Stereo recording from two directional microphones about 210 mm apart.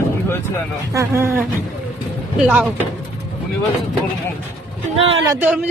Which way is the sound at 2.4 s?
5° right (ahead or behind).